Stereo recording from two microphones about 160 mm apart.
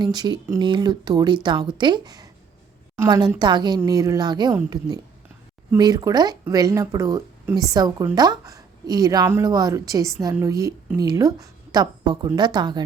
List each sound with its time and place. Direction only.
0.0 s speech: 25° right (ahead or behind)